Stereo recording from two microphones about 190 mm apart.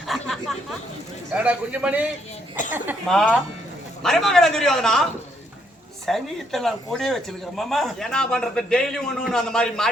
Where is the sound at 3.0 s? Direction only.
5° left (ahead or behind).